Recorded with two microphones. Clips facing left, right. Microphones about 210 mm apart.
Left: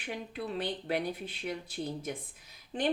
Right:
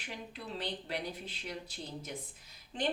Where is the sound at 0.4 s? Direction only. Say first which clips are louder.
Left 5 dB; 55° left (ahead or behind).